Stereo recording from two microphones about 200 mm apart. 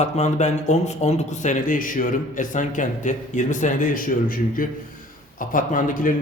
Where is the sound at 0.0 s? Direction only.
35° left (ahead or behind).